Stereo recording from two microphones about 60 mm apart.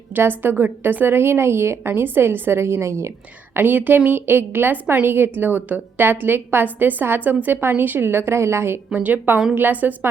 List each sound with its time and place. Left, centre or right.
0.1 s a woman's voice: right
3.5 s a woman's voice: right
8.9 s a woman's voice: right